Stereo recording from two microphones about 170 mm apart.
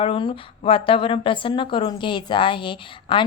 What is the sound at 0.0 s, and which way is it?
A woman's voice, 30° left (ahead or behind).